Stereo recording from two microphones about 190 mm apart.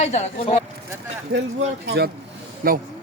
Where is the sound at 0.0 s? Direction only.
35° left (ahead or behind).